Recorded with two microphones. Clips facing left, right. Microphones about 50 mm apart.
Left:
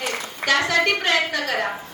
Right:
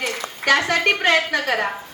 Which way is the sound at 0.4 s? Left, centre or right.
Right.